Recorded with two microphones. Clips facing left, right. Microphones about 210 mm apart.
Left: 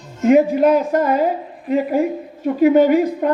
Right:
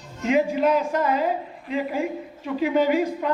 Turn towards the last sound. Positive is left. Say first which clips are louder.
# left 7 dB
turn(degrees=45)  # may be behind; listen again after turning